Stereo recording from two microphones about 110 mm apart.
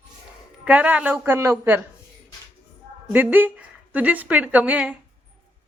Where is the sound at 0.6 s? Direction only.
10° right (ahead or behind).